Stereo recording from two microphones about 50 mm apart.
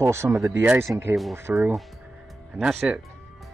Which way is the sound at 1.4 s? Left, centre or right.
Right.